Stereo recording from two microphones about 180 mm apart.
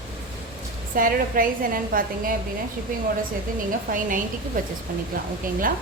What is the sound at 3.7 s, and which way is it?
A woman's voice, 50° right (ahead or behind).